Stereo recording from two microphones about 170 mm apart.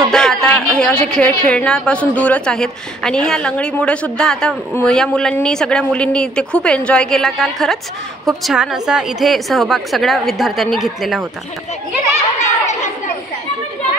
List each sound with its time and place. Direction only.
0.1 s a woman's voice: 5° left (ahead or behind)
12.4 s chatter: 45° left (ahead or behind)